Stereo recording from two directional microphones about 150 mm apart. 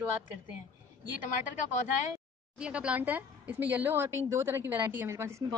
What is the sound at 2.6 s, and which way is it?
Speech, 5° right (ahead or behind).